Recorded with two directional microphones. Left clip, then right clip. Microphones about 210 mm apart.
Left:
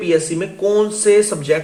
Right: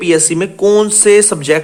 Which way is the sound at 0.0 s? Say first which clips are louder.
Right 5 dB; 45° right (ahead or behind).